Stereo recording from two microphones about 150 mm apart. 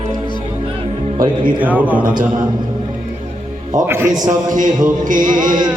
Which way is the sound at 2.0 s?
65° right (ahead or behind).